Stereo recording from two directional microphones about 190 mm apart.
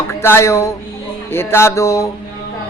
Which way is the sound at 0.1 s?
15° left (ahead or behind).